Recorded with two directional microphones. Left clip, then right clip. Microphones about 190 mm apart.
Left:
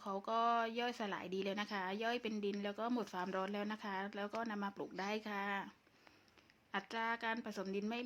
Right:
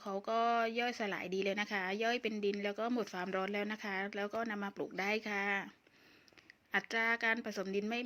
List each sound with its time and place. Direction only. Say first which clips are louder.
0.0 s a woman's voice: right 3 dB; 5° right (ahead or behind)
6.7 s a woman's voice: right 7 dB; 15° right (ahead or behind)